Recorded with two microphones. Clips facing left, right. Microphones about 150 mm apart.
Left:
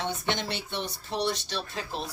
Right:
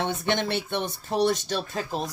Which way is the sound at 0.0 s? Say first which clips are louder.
Right 5 dB; 55° right (ahead or behind).